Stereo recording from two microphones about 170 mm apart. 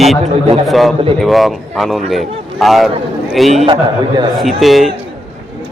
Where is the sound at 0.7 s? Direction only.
Centre (ahead or behind).